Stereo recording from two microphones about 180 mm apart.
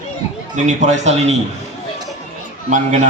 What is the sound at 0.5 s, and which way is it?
Speech, 40° right (ahead or behind).